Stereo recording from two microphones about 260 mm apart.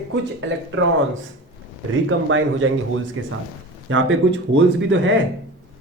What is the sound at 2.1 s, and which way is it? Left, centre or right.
Speech, right.